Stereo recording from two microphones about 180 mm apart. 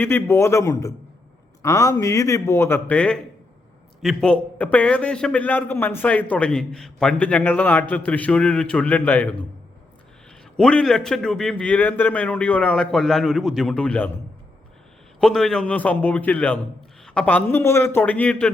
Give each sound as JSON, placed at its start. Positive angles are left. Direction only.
{"t": 0.0, "sound": "a man's voice", "side_deg": 10}
{"t": 10.6, "sound": "a man's voice", "side_deg": 5}
{"t": 15.2, "sound": "a man's voice", "side_deg": 5}